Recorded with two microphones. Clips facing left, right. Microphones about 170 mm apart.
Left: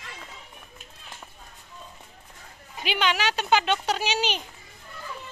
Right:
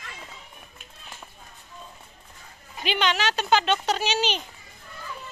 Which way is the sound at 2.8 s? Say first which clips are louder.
Right 1 dB; 10° left (ahead or behind).